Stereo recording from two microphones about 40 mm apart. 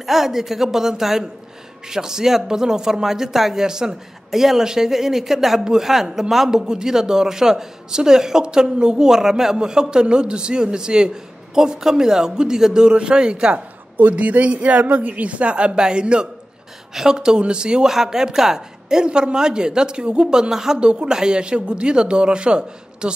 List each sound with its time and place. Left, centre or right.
0.0 s a man's voice: centre; by 13.6 s right
13.9 s a woman's voice: right
17.8 s a man's voice: centre
20.8 s a man's voice: right